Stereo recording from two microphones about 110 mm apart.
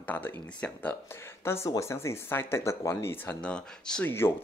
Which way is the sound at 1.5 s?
25° left (ahead or behind).